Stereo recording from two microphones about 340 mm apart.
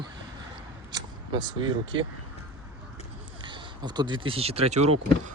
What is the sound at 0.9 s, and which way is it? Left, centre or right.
Speech, centre.